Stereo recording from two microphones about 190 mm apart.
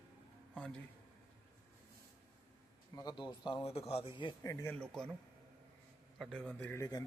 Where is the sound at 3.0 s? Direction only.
20° left (ahead or behind).